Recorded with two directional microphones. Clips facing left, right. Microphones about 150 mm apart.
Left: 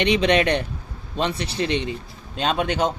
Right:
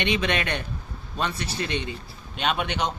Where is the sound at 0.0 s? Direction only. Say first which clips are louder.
Left 7 dB; 30° left (ahead or behind).